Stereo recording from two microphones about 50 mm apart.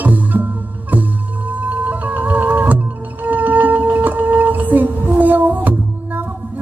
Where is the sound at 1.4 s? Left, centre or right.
Right.